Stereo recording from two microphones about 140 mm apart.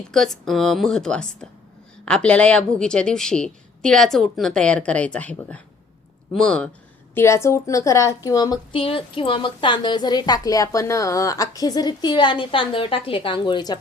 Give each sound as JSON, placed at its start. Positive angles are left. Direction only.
{"t": 0.1, "sound": "a woman's voice", "side_deg": 5}
{"t": 7.1, "sound": "a woman's voice", "side_deg": 20}
{"t": 8.7, "sound": "a woman's voice", "side_deg": 40}